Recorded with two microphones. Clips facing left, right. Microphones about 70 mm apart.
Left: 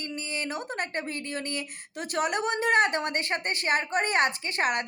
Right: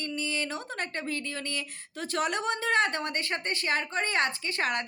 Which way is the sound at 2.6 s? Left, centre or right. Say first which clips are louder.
Left 4 dB; left.